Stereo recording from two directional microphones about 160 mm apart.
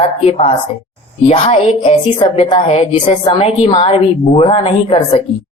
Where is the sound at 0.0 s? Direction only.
40° left (ahead or behind).